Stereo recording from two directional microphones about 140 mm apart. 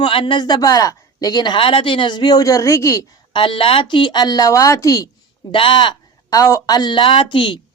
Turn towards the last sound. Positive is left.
turn(degrees=35)  # may be behind; listen again after turning